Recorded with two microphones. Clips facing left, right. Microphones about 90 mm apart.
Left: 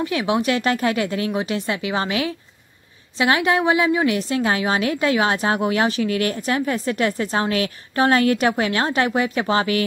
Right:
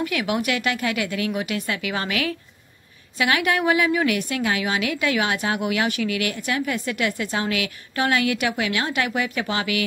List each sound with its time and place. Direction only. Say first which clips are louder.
0.0 s a woman's voice: left 3 dB; 30° left (ahead or behind)